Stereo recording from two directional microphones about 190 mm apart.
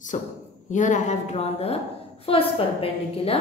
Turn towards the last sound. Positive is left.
turn(degrees=30)  # may be behind; listen again after turning